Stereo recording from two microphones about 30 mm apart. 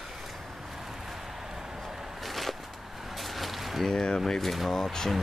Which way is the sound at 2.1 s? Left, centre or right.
Centre.